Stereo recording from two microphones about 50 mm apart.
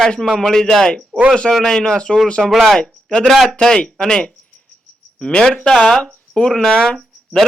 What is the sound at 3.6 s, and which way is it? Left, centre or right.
A man's voice, centre.